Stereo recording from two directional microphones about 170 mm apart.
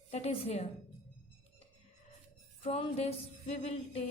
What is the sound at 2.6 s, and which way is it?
A woman's voice, 35° left (ahead or behind).